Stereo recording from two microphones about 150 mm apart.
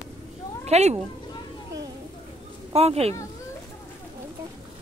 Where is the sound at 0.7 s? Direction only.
45° right (ahead or behind).